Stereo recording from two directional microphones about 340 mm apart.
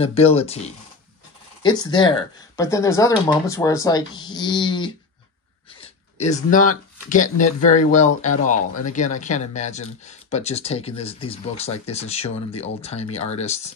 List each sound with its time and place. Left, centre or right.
0.0 s speech: centre
5.8 s a sound: centre
7.1 s speech: left